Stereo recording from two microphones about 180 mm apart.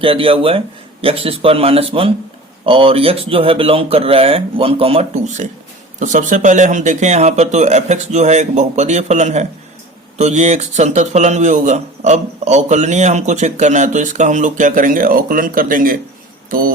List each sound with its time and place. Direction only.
0.0 s a man's voice: 30° right (ahead or behind); by 16.7 s 50° right (ahead or behind)